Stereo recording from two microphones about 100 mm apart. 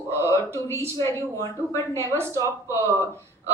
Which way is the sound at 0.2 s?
30° left (ahead or behind).